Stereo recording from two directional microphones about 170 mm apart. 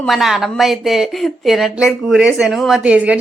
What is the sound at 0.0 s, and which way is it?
Speech, centre (ahead or behind).